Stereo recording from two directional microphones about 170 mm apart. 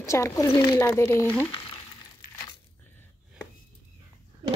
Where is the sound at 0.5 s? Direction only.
15° left (ahead or behind).